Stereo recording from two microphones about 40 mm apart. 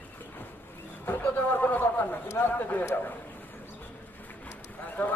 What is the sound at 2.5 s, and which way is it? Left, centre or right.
Speech, left.